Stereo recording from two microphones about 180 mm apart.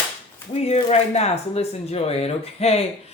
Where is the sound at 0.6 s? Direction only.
35° left (ahead or behind).